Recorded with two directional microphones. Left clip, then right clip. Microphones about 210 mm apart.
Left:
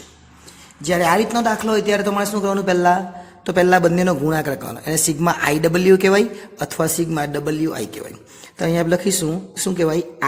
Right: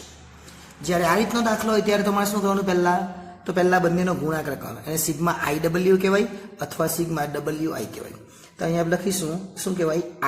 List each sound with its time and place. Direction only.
0.8 s a man's voice: 45° left (ahead or behind)